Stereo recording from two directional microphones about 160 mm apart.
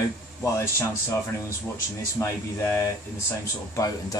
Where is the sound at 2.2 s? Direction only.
15° left (ahead or behind).